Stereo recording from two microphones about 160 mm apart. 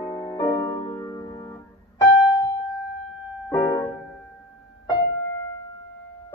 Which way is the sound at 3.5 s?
25° left (ahead or behind).